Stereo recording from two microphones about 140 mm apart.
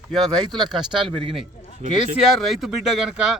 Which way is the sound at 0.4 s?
30° right (ahead or behind).